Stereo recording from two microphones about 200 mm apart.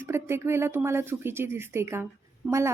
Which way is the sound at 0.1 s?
10° right (ahead or behind).